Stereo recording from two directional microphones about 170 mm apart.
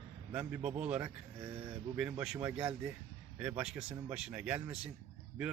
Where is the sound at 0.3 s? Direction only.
10° right (ahead or behind).